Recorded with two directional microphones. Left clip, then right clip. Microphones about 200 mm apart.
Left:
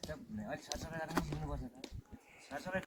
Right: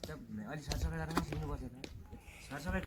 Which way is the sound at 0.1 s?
30° left (ahead or behind).